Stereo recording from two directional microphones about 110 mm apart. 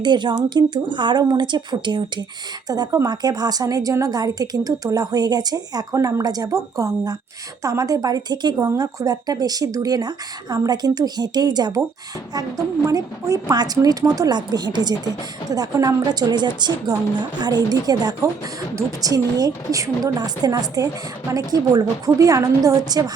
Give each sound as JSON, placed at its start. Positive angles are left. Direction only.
{"t": 0.0, "sound": "a woman's voice", "side_deg": -45}